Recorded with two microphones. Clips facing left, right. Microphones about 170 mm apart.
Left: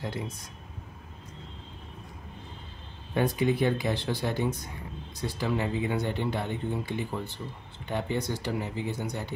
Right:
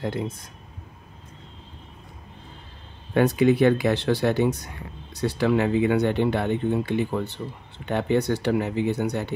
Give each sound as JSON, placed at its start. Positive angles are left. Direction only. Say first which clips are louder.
{"t": 3.2, "sound": "speech", "louder": "right 7 dB", "side_deg": -75}